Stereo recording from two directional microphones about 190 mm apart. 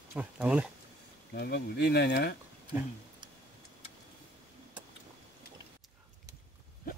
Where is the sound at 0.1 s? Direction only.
5° right (ahead or behind).